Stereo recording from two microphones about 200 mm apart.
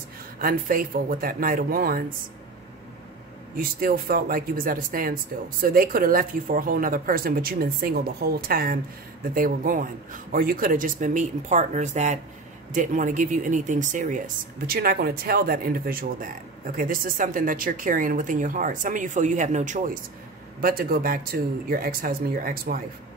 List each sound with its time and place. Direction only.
0.4 s speech: 45° right (ahead or behind)
3.5 s speech: 45° right (ahead or behind)